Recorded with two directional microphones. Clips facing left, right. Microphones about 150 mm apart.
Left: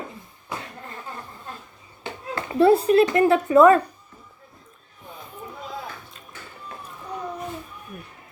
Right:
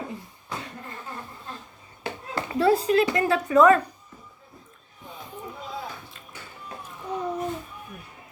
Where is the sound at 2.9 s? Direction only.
30° left (ahead or behind).